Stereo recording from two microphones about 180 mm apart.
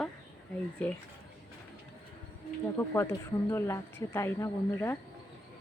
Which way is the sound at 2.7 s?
15° left (ahead or behind).